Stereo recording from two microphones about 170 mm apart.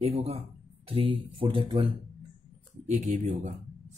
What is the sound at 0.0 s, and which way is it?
A man's voice, 35° right (ahead or behind).